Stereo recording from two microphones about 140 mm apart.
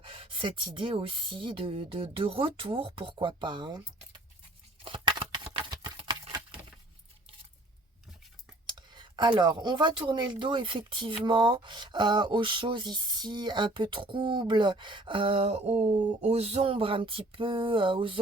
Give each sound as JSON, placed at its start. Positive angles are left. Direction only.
{"t": 0.0, "sound": "speech", "side_deg": -40}
{"t": 4.8, "sound": "a sound", "side_deg": -40}
{"t": 8.6, "sound": "speech", "side_deg": -30}